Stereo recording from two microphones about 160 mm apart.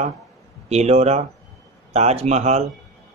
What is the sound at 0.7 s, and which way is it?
Speech, 40° right (ahead or behind).